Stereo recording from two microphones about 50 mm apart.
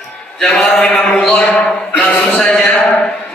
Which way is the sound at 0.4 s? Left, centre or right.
Centre.